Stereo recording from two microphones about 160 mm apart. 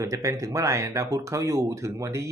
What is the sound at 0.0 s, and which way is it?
Speech, 20° right (ahead or behind).